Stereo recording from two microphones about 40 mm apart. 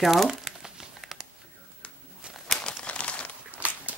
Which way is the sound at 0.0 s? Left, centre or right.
Centre.